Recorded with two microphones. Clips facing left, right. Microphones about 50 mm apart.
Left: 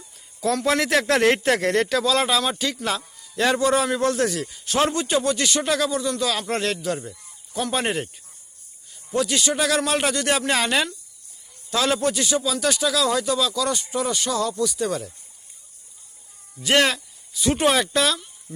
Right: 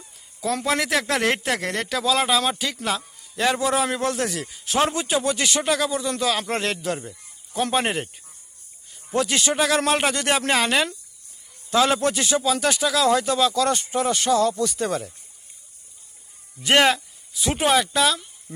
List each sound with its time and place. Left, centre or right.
0.6 s speech: centre; by 5.6 s right
5.6 s speech: centre
5.9 s speech: right
7.5 s speech: right
7.8 s speech: centre
9.0 s speech: right
9.6 s speech: centre
10.5 s speech: centre
11.7 s speech: centre; by 14.8 s right
14.8 s speech: centre
16.6 s speech: centre
17.5 s speech: centre